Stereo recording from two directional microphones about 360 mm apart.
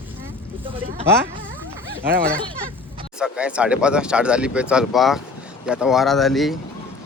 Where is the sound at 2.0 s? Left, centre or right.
Right.